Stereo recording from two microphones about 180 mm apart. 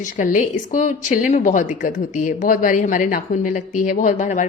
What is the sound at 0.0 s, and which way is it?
A woman's voice, 45° left (ahead or behind).